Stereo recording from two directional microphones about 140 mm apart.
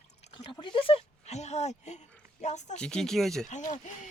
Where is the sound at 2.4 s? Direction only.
55° left (ahead or behind).